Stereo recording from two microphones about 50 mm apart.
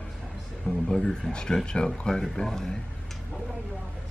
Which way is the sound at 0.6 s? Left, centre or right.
Centre.